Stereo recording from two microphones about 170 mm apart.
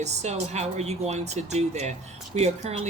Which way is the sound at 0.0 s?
40° right (ahead or behind).